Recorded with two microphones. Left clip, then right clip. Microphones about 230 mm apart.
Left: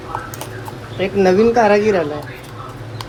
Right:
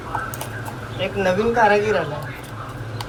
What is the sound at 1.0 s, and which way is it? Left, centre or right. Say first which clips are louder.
Speech: left 7 dB; left.